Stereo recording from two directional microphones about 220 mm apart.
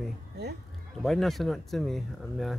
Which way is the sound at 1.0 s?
Centre (ahead or behind).